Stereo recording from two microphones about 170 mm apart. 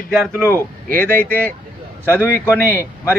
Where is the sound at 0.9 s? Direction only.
10° left (ahead or behind).